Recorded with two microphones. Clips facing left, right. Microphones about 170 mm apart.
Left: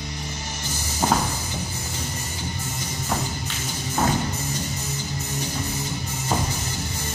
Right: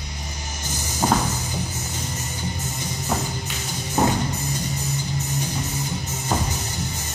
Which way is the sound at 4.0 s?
10° right (ahead or behind).